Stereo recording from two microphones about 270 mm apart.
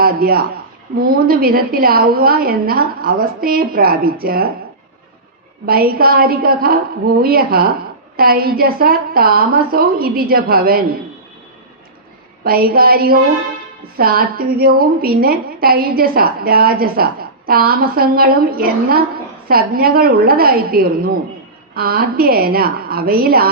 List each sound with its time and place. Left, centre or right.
0.0 s a man's voice: right
5.6 s a woman's voice: right
12.5 s a woman's voice: right